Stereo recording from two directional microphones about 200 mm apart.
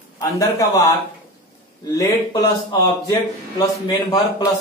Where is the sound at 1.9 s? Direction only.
15° left (ahead or behind).